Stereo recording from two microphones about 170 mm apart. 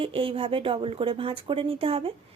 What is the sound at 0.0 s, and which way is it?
A woman's voice, 30° right (ahead or behind).